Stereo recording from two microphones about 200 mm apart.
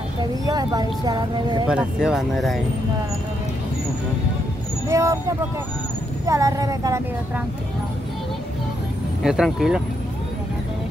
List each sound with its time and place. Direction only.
0.5 s speech: 20° right (ahead or behind)
1.7 s speech: 5° right (ahead or behind)
4.8 s speech: 15° right (ahead or behind)
6.2 s speech: 15° right (ahead or behind)
9.2 s speech: centre (ahead or behind)